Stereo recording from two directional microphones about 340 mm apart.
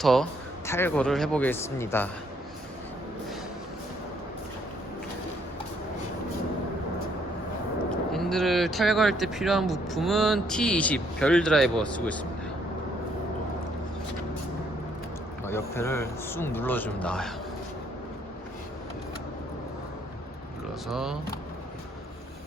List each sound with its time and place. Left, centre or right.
0.0 s speech: centre
8.1 s speech: centre
15.4 s speech: centre
20.8 s speech: centre